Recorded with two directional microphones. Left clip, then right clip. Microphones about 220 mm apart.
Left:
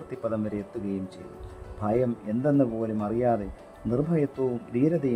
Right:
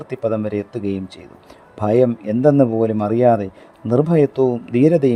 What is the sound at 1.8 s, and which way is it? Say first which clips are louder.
Speech: right 11 dB; 35° right (ahead or behind).